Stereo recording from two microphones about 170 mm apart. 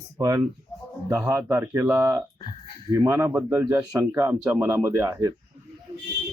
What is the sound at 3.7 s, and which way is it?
Speech, 20° right (ahead or behind).